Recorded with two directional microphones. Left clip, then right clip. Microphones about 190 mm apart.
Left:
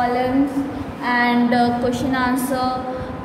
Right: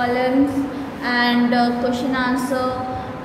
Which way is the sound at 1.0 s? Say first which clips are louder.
Left 1 dB; 10° left (ahead or behind).